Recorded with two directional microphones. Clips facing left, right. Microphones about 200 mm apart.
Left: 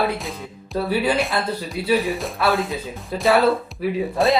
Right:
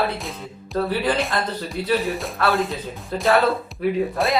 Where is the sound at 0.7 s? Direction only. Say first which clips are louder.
Left 1 dB; 10° left (ahead or behind).